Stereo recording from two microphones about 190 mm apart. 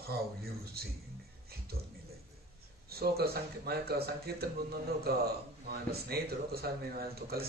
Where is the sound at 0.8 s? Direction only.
55° right (ahead or behind).